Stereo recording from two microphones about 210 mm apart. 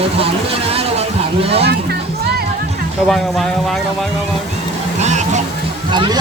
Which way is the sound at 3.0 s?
Centre (ahead or behind).